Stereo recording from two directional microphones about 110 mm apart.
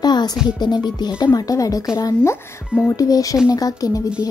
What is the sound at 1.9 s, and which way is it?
Speech, 25° left (ahead or behind).